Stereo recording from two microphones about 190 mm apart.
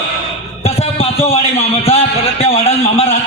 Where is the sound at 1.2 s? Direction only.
30° left (ahead or behind).